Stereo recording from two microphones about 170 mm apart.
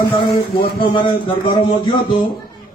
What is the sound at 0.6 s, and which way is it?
A man's voice, 30° left (ahead or behind).